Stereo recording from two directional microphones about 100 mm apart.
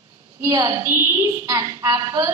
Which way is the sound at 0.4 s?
30° right (ahead or behind).